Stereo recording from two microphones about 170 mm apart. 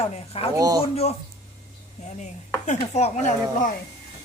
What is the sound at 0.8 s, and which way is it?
Speech, 35° left (ahead or behind).